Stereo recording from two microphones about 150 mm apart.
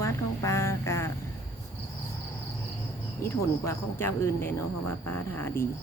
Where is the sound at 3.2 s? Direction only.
15° left (ahead or behind).